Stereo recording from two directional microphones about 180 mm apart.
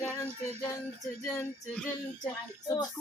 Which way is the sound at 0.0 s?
15° left (ahead or behind).